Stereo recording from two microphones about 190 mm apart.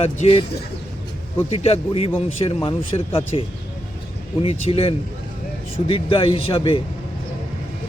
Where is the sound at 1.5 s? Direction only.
30° left (ahead or behind).